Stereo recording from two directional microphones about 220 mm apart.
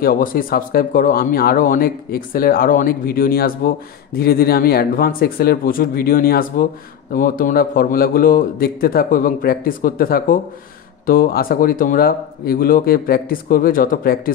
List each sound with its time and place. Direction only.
0.0 s speech: 40° left (ahead or behind)